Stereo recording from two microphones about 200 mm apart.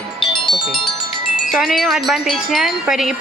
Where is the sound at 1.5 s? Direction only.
Centre (ahead or behind).